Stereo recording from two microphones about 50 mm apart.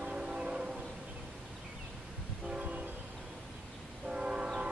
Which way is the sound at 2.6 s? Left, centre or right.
Right.